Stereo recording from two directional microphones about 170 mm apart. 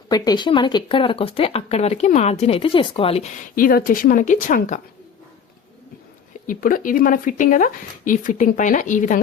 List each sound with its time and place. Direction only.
0.1 s speech: 25° left (ahead or behind); by 4.8 s 50° left (ahead or behind)
6.5 s speech: 55° left (ahead or behind)